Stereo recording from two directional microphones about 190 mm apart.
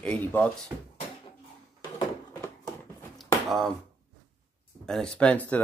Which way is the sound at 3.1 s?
Centre (ahead or behind).